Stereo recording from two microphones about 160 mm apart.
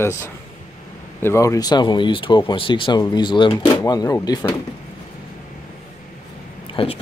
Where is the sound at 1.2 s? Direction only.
20° left (ahead or behind).